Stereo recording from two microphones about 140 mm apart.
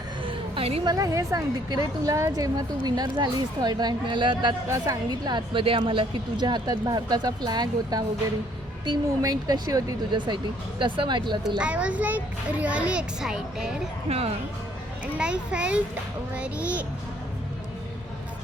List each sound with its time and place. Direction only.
0.3 s a sound: 40° right (ahead or behind)
0.9 s a woman's voice: 25° right (ahead or behind)
11.4 s a child's voice: 5° right (ahead or behind)
14.1 s speech: 45° right (ahead or behind)
15.2 s a child's voice: 10° right (ahead or behind)